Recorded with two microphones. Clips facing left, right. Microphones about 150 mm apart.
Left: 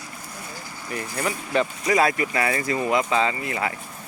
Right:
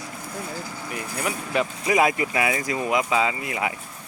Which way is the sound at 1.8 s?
15° right (ahead or behind).